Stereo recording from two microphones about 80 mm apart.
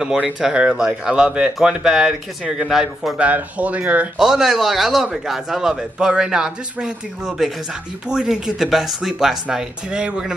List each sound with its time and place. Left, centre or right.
0.2 s speech: centre
3.2 s speech: centre
4.2 s a man's voice: centre